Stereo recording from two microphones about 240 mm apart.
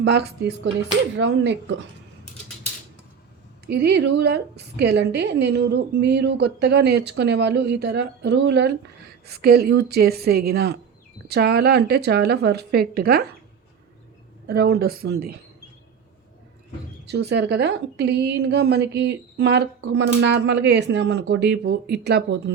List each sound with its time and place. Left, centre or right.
0.0 s a woman's voice: right
3.7 s a woman's voice: right
14.4 s speech: right
17.1 s a woman's voice: right